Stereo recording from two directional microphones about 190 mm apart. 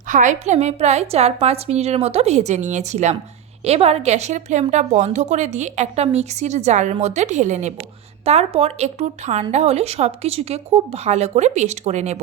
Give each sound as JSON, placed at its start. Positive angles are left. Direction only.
{"t": 0.1, "sound": "a woman's voice", "side_deg": -40}